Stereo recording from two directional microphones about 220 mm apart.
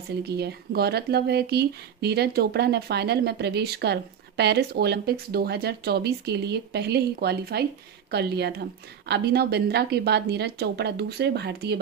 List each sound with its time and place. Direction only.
0.2 s speech: 45° right (ahead or behind)